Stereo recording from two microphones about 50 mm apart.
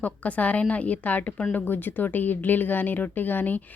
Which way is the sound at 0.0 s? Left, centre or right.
Left.